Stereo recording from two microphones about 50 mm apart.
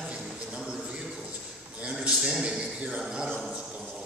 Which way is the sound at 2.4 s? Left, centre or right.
Centre.